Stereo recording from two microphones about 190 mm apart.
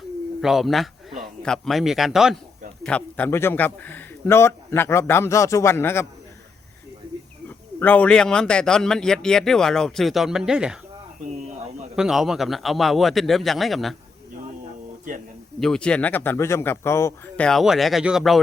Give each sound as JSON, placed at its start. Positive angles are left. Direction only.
{"t": 0.4, "sound": "speech", "side_deg": 0}
{"t": 7.4, "sound": "speech", "side_deg": 10}
{"t": 11.9, "sound": "speech", "side_deg": 0}
{"t": 15.6, "sound": "speech", "side_deg": 5}